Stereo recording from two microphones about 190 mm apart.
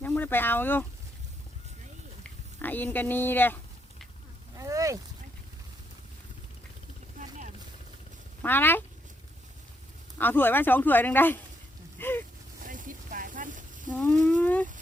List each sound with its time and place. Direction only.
0.0 s speech: 10° left (ahead or behind)
2.2 s a sound: 10° left (ahead or behind)
4.5 s boat: 15° right (ahead or behind)
7.2 s vehicle: 40° right (ahead or behind)
8.4 s speech: 10° left (ahead or behind)
10.2 s speech: 10° left (ahead or behind)
11.9 s a sound: 10° left (ahead or behind)
12.6 s a sound: 45° right (ahead or behind)
13.9 s speech: 5° left (ahead or behind)